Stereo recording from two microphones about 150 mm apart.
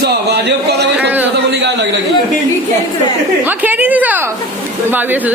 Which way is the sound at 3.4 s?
10° right (ahead or behind).